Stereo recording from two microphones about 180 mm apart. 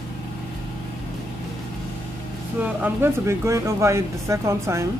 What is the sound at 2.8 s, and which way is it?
Speech, 15° right (ahead or behind).